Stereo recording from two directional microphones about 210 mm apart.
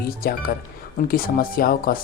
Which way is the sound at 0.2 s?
45° left (ahead or behind).